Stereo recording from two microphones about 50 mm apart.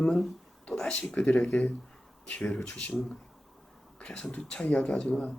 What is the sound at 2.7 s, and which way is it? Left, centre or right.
Speech, left.